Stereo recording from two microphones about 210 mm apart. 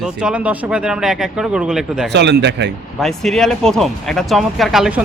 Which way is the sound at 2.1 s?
55° right (ahead or behind).